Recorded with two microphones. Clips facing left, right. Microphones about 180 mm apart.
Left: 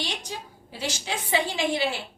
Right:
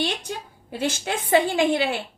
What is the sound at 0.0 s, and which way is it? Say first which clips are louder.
A woman's voice: right 6 dB; 55° right (ahead or behind).